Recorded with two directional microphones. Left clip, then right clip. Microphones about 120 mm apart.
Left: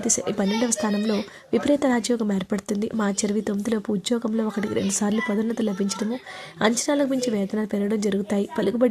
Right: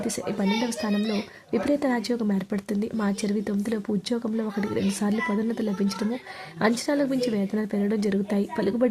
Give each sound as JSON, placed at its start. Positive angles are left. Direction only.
{"t": 0.0, "sound": "speech", "side_deg": 30}